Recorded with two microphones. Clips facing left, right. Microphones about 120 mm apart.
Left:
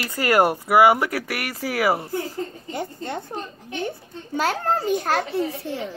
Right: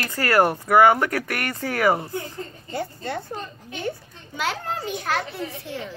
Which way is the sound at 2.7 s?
20° left (ahead or behind).